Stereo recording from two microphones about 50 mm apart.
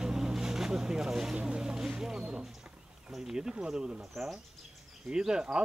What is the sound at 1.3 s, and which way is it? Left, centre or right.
Speech, centre.